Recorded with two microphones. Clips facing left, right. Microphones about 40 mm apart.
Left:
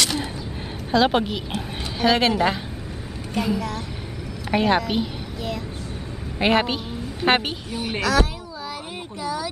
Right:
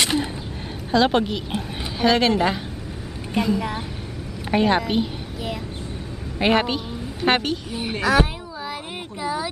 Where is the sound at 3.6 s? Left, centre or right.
Centre.